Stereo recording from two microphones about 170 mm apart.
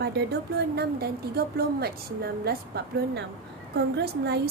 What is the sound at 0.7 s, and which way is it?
A woman's voice, 65° right (ahead or behind).